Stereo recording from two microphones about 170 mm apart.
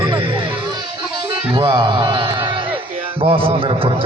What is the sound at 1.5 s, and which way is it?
Music, 30° right (ahead or behind).